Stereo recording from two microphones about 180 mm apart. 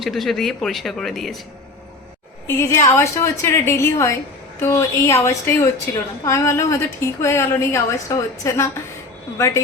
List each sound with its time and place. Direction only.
0.0 s speech: centre (ahead or behind)
2.5 s a woman's voice: 15° left (ahead or behind)